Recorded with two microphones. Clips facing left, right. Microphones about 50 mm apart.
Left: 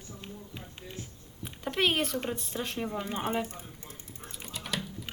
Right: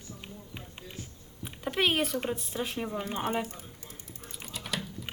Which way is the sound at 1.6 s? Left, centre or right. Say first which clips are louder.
Even; centre.